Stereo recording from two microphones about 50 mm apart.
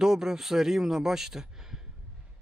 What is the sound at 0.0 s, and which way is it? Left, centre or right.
A man's voice, centre.